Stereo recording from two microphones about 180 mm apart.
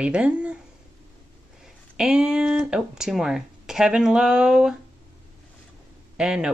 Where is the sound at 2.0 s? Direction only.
5° right (ahead or behind).